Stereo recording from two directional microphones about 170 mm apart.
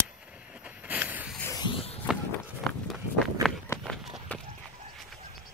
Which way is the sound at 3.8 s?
Centre (ahead or behind).